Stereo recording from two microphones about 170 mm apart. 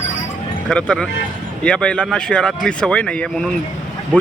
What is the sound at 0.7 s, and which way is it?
Speech, 5° left (ahead or behind).